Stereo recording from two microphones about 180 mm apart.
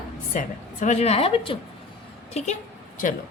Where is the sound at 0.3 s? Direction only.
40° left (ahead or behind).